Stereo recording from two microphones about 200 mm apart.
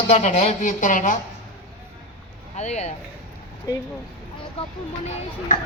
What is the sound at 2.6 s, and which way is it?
Speech, 35° left (ahead or behind).